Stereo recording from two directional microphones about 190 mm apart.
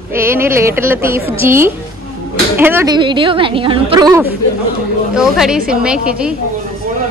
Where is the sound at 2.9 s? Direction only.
25° right (ahead or behind).